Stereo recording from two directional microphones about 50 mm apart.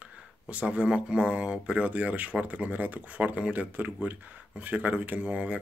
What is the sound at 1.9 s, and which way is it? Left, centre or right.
Speech, right.